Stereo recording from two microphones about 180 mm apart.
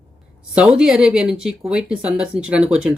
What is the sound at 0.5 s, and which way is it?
Speech, 5° right (ahead or behind).